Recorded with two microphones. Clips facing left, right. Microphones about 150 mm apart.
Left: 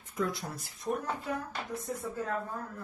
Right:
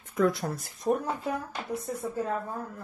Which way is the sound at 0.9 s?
35° right (ahead or behind).